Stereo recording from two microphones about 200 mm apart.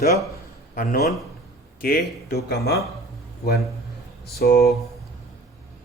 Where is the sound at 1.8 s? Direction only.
50° left (ahead or behind).